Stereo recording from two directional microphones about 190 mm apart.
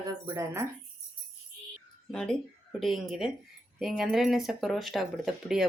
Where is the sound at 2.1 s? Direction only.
5° left (ahead or behind).